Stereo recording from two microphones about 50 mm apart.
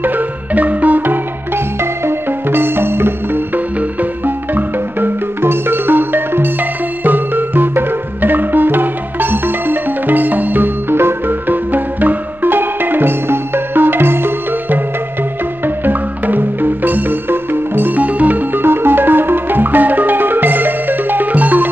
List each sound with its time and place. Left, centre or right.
0.0 s music: right
1.8 s music: right
4.6 s music: right